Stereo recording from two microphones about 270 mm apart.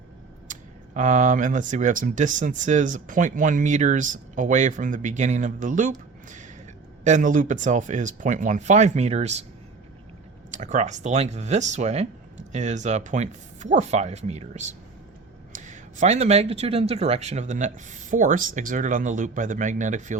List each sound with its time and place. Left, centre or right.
0.4 s speech: right
10.5 s speech: right